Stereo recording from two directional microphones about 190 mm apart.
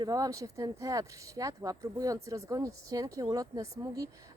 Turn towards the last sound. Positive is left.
turn(degrees=-20)  # may be behind; listen again after turning